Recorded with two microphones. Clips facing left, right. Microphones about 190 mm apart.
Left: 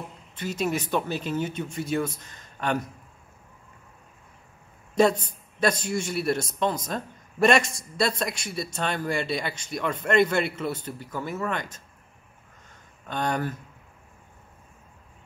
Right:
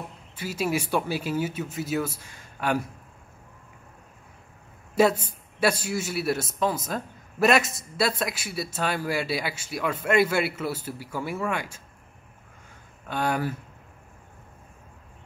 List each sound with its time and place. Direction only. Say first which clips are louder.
0.4 s a man's voice: even; 10° right (ahead or behind)
4.9 s a man's voice: even; 5° right (ahead or behind)
13.0 s a man's voice: right 1 dB; 5° right (ahead or behind)